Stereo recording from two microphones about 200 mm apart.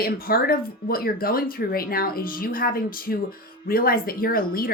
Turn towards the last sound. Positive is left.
turn(degrees=45)  # may be behind; listen again after turning